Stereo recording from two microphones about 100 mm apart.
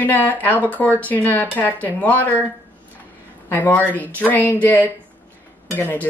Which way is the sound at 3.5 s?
20° left (ahead or behind).